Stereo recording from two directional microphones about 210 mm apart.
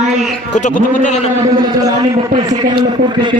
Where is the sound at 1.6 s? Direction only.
20° right (ahead or behind).